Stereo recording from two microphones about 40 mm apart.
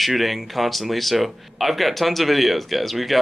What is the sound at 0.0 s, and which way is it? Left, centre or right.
Speech, centre.